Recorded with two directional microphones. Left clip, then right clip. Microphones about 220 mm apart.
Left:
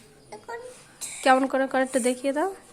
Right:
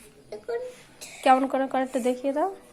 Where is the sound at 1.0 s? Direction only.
25° left (ahead or behind).